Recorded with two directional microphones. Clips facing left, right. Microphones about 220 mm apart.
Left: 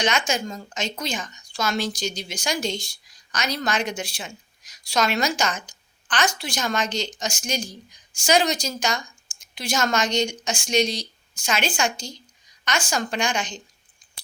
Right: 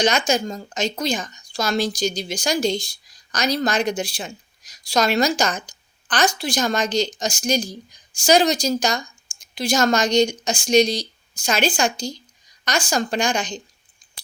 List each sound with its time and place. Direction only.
0.0 s a woman's voice: 35° right (ahead or behind)